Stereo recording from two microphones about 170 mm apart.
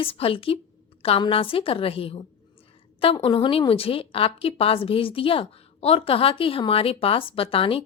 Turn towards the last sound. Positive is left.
turn(degrees=35)  # may be behind; listen again after turning